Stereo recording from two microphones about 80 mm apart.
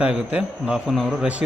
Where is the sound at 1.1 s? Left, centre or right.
Centre.